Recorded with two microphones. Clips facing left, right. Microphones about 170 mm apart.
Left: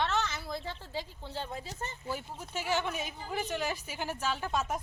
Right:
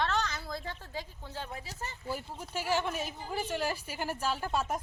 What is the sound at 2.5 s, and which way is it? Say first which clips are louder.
A woman's voice: right 1 dB; 5° right (ahead or behind).